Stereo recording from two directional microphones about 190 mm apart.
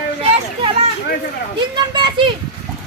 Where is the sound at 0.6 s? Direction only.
30° right (ahead or behind).